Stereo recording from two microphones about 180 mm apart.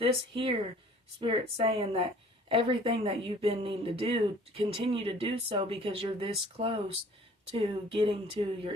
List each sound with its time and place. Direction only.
0.0 s speech: 30° right (ahead or behind)